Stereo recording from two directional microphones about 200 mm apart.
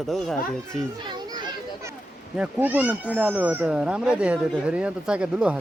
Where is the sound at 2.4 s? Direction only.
10° right (ahead or behind).